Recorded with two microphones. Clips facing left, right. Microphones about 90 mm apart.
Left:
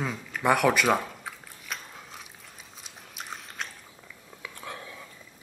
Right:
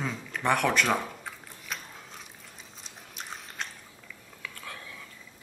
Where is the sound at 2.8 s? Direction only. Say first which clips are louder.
Left 1 dB; 5° left (ahead or behind).